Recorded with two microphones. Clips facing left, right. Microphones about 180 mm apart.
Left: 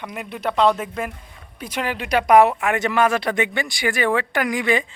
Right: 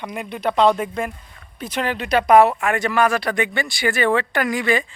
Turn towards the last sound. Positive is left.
turn(degrees=20)  # may be behind; listen again after turning